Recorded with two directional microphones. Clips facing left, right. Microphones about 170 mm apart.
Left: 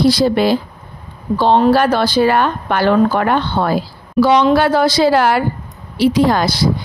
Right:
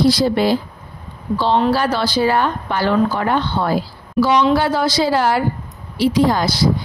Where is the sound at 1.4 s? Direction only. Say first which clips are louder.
Left 5 dB; 50° left (ahead or behind).